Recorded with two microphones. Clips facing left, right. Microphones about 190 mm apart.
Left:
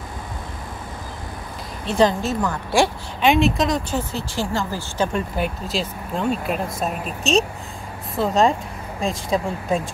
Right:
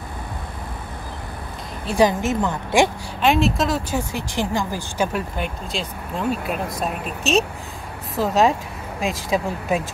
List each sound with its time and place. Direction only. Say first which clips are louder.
1.9 s speech: even; 15° right (ahead or behind)
3.2 s speech: left 1 dB; centre (ahead or behind)
5.4 s speech: left 3 dB; centre (ahead or behind)